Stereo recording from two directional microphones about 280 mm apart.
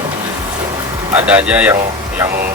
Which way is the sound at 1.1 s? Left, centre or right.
Centre.